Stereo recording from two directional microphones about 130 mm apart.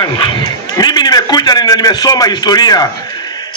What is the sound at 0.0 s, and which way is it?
A man's voice, 30° left (ahead or behind).